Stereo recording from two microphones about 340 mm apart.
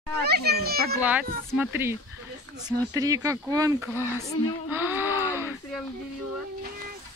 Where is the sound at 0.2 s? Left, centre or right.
Right.